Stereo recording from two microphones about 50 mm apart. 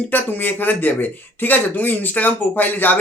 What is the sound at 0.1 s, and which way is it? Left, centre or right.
Speech, left.